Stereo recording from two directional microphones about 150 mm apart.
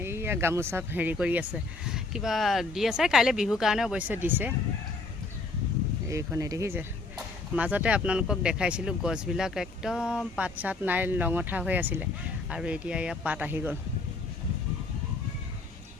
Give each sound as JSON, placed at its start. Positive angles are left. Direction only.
{"t": 0.0, "sound": "speech", "side_deg": -15}
{"t": 6.1, "sound": "speech", "side_deg": -20}